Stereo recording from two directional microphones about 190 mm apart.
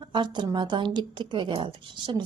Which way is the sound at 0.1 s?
25° right (ahead or behind).